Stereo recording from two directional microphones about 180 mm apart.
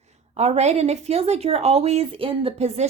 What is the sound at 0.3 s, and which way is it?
Speech, 35° right (ahead or behind).